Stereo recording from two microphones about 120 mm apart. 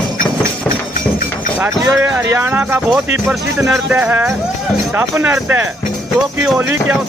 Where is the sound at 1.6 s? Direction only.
15° right (ahead or behind).